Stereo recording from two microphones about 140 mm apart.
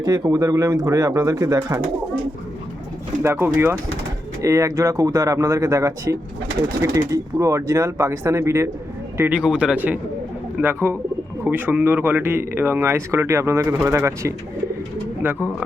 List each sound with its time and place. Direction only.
0.0 s speech: 25° right (ahead or behind)
3.2 s speech: 15° right (ahead or behind)